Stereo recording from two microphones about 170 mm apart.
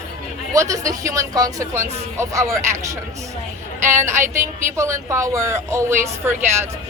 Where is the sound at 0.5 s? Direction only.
20° right (ahead or behind).